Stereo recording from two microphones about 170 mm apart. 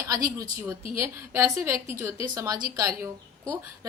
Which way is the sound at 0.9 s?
15° right (ahead or behind).